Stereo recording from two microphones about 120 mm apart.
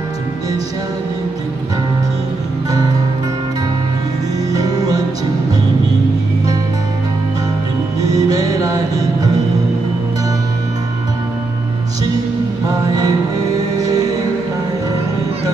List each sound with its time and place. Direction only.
4.5 s music: 30° right (ahead or behind)
8.0 s music: 30° right (ahead or behind)
12.6 s music: 30° right (ahead or behind)